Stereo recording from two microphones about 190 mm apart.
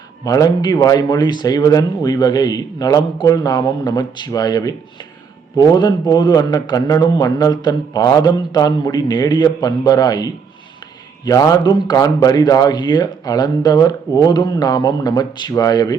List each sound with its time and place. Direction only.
0.3 s speech: 20° left (ahead or behind)